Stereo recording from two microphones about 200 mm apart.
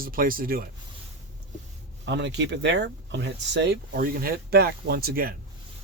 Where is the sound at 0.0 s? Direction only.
45° right (ahead or behind).